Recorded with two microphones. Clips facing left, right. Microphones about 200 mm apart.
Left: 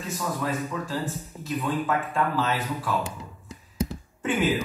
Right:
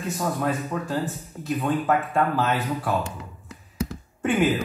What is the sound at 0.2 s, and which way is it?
Speech, 55° right (ahead or behind).